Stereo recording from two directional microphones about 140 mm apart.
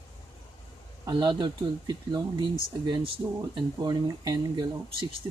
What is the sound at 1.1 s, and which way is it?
Speech, 30° right (ahead or behind).